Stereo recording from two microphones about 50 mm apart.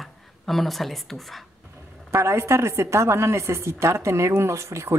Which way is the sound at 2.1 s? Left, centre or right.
Right.